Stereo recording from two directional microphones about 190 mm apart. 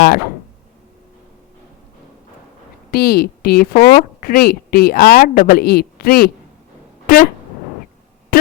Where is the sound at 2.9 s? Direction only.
55° left (ahead or behind).